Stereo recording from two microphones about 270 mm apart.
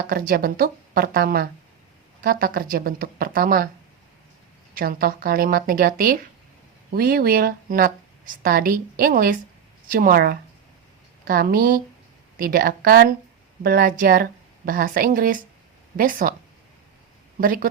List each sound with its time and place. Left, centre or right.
0.1 s a woman's voice: right
4.7 s a woman's voice: right
17.4 s a woman's voice: right